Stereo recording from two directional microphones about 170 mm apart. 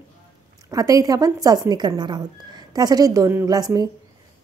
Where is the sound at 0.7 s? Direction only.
20° right (ahead or behind).